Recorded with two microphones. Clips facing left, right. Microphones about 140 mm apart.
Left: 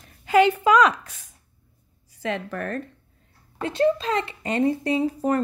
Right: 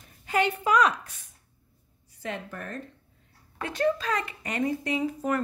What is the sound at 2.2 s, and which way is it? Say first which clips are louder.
Speech: left 7 dB; 90° left.